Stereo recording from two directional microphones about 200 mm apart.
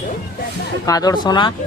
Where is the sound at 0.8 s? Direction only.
20° left (ahead or behind).